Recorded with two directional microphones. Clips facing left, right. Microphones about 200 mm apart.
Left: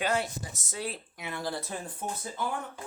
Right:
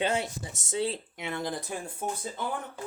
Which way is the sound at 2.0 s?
10° right (ahead or behind).